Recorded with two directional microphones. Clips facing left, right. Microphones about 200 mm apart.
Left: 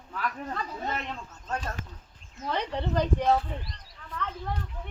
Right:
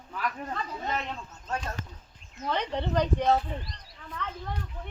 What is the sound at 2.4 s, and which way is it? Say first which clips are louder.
Speech: even; 5° left (ahead or behind).